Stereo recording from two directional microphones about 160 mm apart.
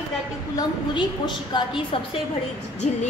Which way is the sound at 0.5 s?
30° left (ahead or behind).